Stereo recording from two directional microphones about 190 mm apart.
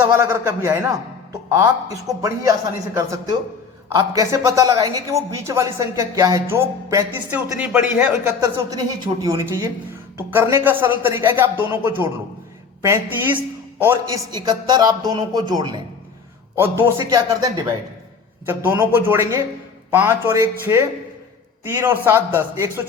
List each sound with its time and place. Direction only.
0.2 s speech: 10° right (ahead or behind)
8.7 s a woman's voice: 20° right (ahead or behind)
14.3 s a woman's voice: 20° right (ahead or behind)
16.6 s speech: 10° right (ahead or behind)